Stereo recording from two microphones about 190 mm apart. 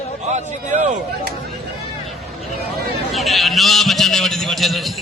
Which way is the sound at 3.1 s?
Centre (ahead or behind).